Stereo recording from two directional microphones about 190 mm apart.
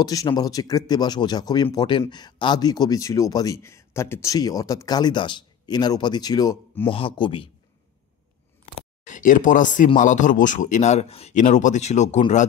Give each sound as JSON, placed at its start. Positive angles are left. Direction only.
{"t": 0.0, "sound": "speech", "side_deg": 20}
{"t": 8.7, "sound": "a man's voice", "side_deg": 40}